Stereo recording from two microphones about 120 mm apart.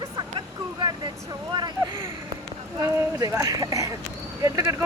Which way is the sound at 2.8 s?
30° right (ahead or behind).